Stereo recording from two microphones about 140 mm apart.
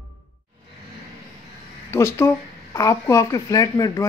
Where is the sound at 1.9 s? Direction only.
20° left (ahead or behind).